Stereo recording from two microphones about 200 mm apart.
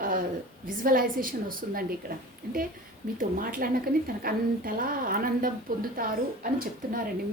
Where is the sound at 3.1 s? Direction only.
45° right (ahead or behind).